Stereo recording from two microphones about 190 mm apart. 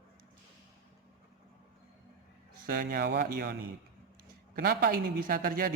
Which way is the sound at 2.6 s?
50° right (ahead or behind).